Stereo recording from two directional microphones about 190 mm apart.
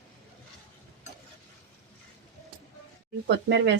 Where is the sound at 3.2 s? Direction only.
70° right (ahead or behind).